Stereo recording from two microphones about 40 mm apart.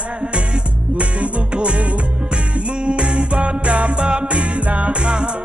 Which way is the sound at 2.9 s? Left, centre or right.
Right.